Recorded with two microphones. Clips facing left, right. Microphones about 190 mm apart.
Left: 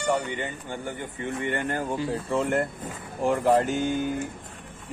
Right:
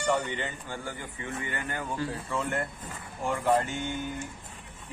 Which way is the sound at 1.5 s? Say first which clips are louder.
Left 7 dB; 35° left (ahead or behind).